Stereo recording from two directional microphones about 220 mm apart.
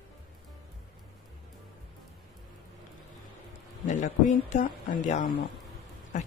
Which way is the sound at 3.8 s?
35° left (ahead or behind).